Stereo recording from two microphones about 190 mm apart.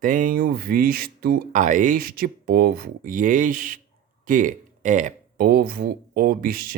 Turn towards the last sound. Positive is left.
turn(degrees=-50)  # may be behind; listen again after turning